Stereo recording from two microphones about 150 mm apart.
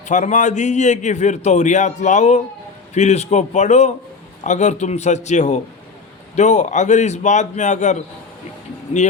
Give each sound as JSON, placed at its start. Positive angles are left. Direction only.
{"t": 0.1, "sound": "a man's voice", "side_deg": 55}